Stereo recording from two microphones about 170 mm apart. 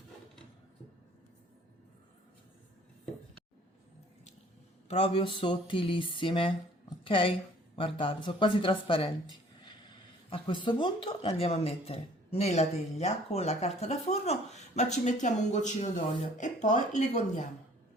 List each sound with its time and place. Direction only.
4.9 s a woman's voice: 35° left (ahead or behind)
10.2 s speech: 30° left (ahead or behind); by 17.4 s 45° left (ahead or behind)